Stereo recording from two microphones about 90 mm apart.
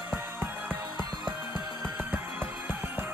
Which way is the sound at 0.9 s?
55° left (ahead or behind).